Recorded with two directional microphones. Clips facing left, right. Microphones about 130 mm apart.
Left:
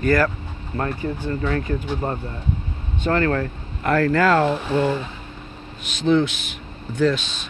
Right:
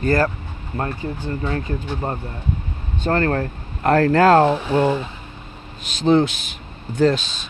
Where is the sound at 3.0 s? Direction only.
40° right (ahead or behind).